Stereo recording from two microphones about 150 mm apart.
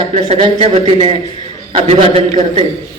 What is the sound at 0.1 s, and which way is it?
A man's voice, 45° right (ahead or behind).